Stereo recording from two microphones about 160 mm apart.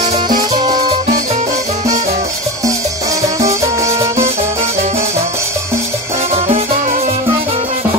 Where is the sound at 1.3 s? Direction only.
45° right (ahead or behind).